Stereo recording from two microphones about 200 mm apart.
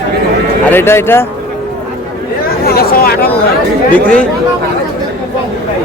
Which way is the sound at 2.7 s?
50° left (ahead or behind).